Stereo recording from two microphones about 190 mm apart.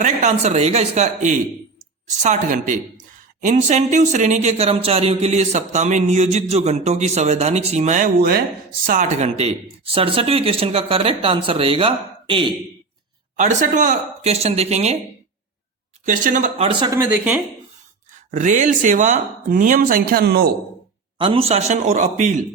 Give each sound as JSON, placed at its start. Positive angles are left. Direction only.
{"t": 0.0, "sound": "speech", "side_deg": -40}
{"t": 8.9, "sound": "speech", "side_deg": -40}
{"t": 13.3, "sound": "speech", "side_deg": -40}
{"t": 16.0, "sound": "speech", "side_deg": -40}
{"t": 16.8, "sound": "speech", "side_deg": -15}
{"t": 18.3, "sound": "speech", "side_deg": -40}
{"t": 21.2, "sound": "speech", "side_deg": -30}